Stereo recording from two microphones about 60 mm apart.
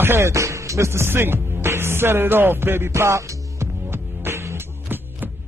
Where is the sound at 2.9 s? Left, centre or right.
Right.